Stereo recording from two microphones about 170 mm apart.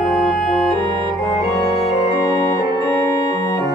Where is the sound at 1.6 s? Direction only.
35° left (ahead or behind).